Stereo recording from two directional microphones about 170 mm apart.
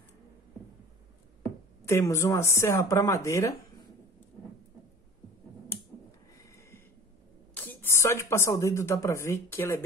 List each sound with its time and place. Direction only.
1.9 s speech: 15° left (ahead or behind)
6.3 s a sound: 15° left (ahead or behind)
7.5 s speech: 10° left (ahead or behind)